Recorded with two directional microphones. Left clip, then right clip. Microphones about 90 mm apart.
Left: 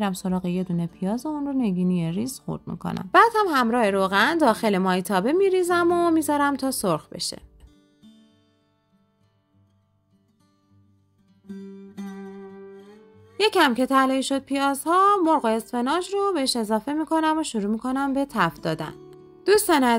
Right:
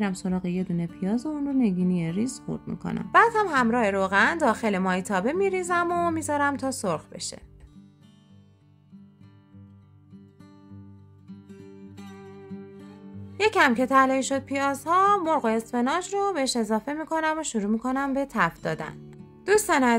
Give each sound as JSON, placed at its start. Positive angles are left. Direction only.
{"t": 0.0, "sound": "a woman's voice", "side_deg": 35}
{"t": 1.3, "sound": "a woman's voice", "side_deg": 20}
{"t": 1.6, "sound": "a woman's voice", "side_deg": 35}
{"t": 13.4, "sound": "a woman's voice", "side_deg": 25}